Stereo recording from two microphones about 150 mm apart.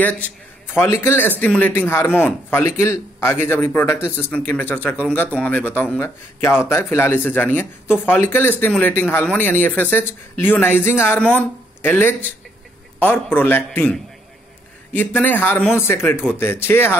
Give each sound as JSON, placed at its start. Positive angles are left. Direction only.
{"t": 0.7, "sound": "speech", "side_deg": 20}